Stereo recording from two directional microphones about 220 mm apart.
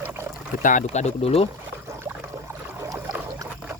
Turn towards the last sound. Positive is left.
turn(degrees=-10)  # may be behind; listen again after turning